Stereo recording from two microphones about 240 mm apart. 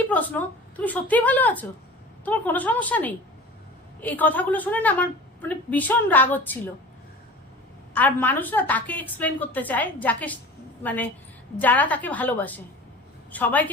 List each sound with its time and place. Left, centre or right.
0.1 s a woman's voice: centre
7.9 s a woman's voice: centre